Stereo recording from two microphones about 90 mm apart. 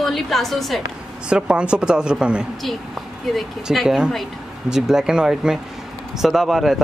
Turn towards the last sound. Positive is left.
turn(degrees=-5)  # may be behind; listen again after turning